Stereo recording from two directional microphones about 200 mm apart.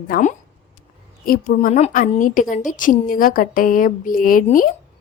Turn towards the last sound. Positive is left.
turn(degrees=45)  # may be behind; listen again after turning